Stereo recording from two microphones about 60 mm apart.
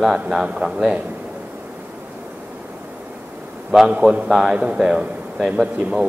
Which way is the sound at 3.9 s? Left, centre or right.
Centre.